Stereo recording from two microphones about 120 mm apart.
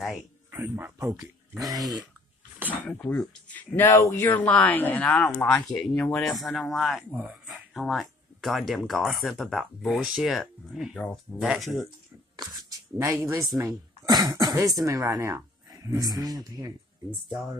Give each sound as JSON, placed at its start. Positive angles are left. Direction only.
{"t": 0.6, "sound": "speech", "side_deg": -15}
{"t": 0.9, "sound": "speech", "side_deg": -25}
{"t": 2.7, "sound": "speech", "side_deg": 15}
{"t": 4.5, "sound": "speech", "side_deg": 10}
{"t": 5.0, "sound": "speech", "side_deg": 5}
{"t": 12.4, "sound": "speech", "side_deg": -30}